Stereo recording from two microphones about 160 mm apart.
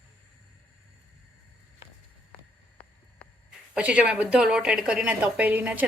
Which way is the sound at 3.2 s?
10° left (ahead or behind).